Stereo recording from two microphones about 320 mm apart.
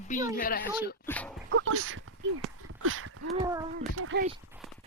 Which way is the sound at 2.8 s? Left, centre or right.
Right.